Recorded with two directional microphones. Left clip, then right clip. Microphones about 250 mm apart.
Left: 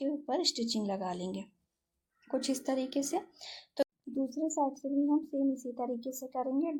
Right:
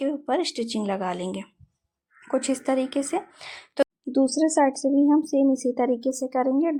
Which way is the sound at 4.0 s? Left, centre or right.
Right.